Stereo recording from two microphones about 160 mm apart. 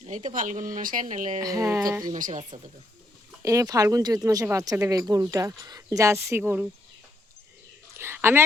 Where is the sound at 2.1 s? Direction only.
50° right (ahead or behind).